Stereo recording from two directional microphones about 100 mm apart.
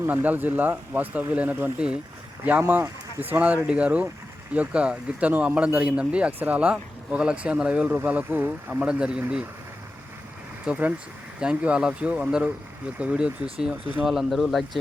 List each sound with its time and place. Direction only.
0.0 s speech: 15° right (ahead or behind)
10.7 s speech: 15° right (ahead or behind); by 14.8 s centre (ahead or behind)